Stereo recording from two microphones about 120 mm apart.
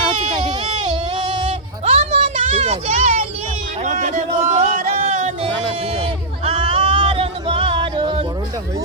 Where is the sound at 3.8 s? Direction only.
90° right; by 5.5 s 70° right (ahead or behind).